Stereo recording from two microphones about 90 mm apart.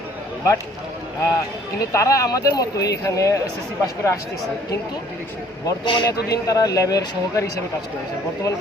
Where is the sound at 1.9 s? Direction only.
40° left (ahead or behind).